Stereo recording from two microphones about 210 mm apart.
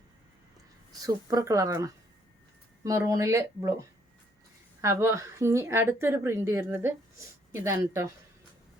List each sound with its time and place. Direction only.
1.0 s a woman's voice: 15° right (ahead or behind)